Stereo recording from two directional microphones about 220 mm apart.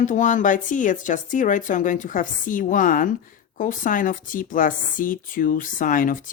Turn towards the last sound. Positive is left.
turn(degrees=40)  # may be behind; listen again after turning